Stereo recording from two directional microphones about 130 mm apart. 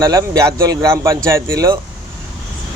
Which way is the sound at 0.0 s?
30° right (ahead or behind).